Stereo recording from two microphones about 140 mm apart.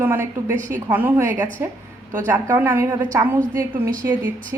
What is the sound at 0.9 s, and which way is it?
Speech, 15° right (ahead or behind).